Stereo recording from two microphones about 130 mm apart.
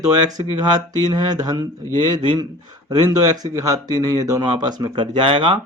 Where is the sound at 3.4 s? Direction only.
30° right (ahead or behind); by 5.6 s 45° right (ahead or behind).